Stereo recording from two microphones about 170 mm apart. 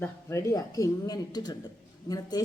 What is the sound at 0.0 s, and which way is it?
A woman's voice, 15° left (ahead or behind).